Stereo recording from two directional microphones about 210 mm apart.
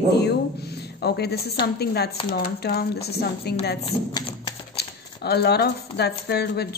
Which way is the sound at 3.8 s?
20° left (ahead or behind).